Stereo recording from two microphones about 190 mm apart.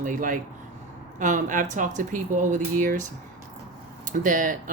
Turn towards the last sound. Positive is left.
turn(degrees=-45)  # may be behind; listen again after turning